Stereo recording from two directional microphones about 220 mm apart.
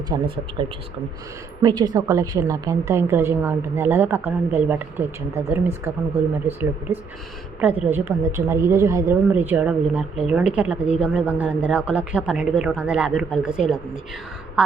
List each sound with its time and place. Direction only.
0.1 s a woman's voice: 20° right (ahead or behind); by 13.7 s 5° right (ahead or behind)